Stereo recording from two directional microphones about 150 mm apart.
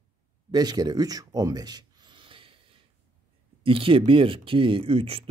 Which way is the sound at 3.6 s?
35° right (ahead or behind).